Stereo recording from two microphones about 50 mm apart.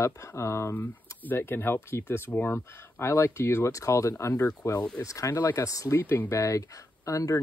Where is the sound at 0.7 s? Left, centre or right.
Left.